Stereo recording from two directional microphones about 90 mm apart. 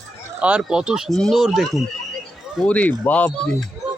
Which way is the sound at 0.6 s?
10° right (ahead or behind).